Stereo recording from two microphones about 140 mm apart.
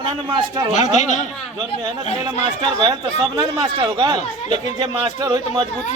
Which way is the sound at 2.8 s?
30° right (ahead or behind).